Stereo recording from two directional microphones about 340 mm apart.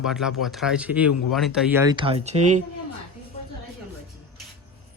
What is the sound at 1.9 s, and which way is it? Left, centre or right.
Speech, centre.